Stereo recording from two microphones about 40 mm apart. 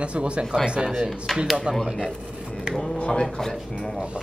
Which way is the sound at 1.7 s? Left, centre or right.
Right.